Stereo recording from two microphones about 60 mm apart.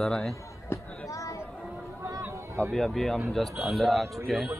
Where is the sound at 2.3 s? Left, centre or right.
Right.